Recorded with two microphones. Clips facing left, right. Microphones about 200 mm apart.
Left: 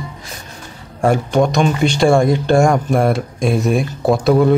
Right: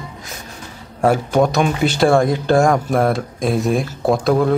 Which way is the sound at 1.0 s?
5° right (ahead or behind).